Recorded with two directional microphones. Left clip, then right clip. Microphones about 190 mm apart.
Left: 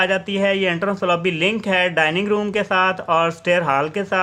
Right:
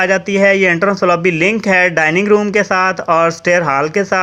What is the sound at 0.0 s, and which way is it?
Speech, 25° right (ahead or behind).